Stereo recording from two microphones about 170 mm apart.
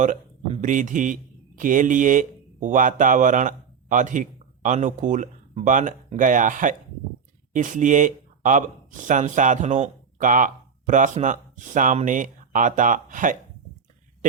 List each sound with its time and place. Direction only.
0.0 s a man's voice: 50° right (ahead or behind)